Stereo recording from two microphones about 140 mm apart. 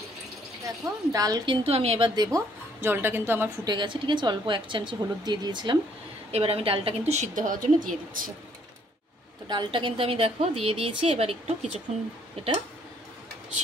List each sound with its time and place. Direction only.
0.7 s a woman's voice: 25° right (ahead or behind)
2.3 s speech: 15° right (ahead or behind)
3.6 s a woman's voice: 35° right (ahead or behind)
6.3 s a woman's voice: 45° right (ahead or behind); by 8.3 s 75° right (ahead or behind)
9.5 s a woman's voice: 35° right (ahead or behind)